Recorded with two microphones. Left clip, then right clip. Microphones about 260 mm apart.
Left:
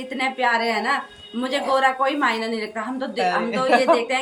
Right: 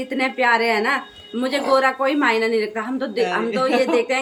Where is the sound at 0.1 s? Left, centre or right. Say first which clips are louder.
Right 3 dB; centre.